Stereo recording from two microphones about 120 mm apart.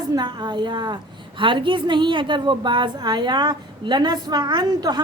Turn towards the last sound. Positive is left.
turn(degrees=-40)  # may be behind; listen again after turning